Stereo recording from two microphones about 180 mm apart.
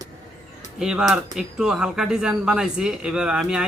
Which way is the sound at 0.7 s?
5° right (ahead or behind).